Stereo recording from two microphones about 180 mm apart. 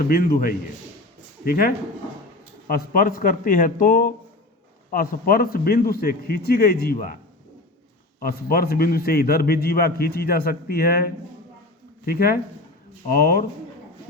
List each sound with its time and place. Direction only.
0.1 s a man's voice: 55° left (ahead or behind)
8.2 s a man's voice: 55° left (ahead or behind)